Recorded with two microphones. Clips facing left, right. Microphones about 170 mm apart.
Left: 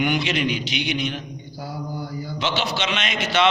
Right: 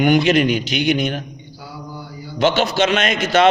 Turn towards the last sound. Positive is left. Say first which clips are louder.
# right 7 dB
turn(degrees=-45)  # may be behind; listen again after turning